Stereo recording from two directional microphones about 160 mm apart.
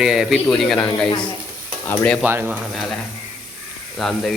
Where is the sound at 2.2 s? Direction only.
10° right (ahead or behind).